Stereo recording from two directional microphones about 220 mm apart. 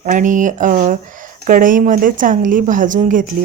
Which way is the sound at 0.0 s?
35° right (ahead or behind).